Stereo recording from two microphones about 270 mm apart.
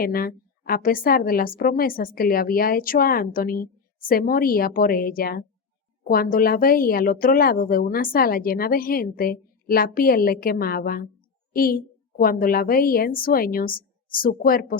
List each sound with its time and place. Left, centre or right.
0.0 s a woman's voice: left